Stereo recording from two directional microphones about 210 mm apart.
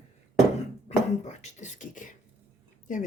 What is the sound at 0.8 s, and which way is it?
Speech, 35° left (ahead or behind).